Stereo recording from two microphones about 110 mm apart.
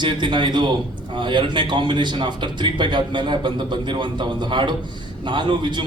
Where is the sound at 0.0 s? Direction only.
45° right (ahead or behind).